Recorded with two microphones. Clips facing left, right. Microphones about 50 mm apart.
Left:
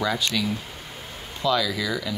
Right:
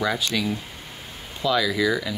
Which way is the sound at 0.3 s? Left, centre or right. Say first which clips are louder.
Right 1 dB; centre.